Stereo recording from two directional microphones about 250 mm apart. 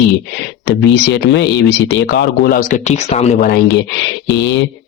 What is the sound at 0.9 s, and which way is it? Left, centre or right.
Speech, left.